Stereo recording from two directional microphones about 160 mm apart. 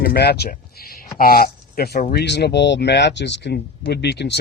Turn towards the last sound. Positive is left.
turn(degrees=90)